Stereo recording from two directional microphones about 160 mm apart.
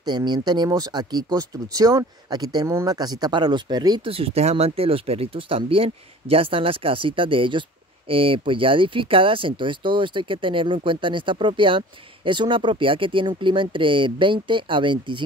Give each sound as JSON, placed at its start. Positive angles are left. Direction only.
{"t": 0.0, "sound": "speech", "side_deg": -25}